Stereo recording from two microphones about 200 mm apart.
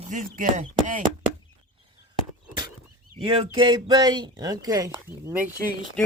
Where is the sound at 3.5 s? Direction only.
20° right (ahead or behind).